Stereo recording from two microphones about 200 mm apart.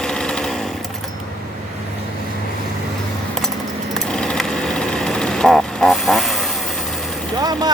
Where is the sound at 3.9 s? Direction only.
5° left (ahead or behind).